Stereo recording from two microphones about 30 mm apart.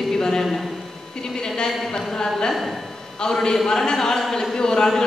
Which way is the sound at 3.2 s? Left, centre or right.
Centre.